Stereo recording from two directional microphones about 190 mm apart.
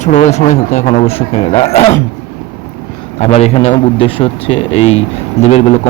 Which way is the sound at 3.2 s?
35° left (ahead or behind).